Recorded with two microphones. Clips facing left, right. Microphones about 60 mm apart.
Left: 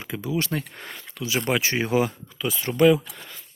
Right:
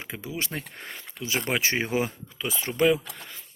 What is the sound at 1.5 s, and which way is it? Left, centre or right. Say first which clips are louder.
Speech: left 3 dB; right.